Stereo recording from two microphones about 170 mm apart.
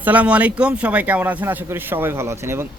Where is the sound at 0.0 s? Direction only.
10° right (ahead or behind).